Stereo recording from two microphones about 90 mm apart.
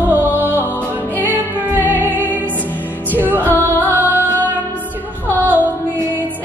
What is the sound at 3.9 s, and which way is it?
Music, 20° right (ahead or behind).